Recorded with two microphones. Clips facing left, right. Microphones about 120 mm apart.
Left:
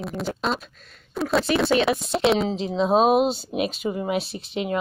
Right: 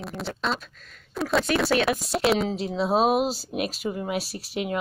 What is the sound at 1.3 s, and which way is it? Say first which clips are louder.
Speech: left 2 dB; centre (ahead or behind).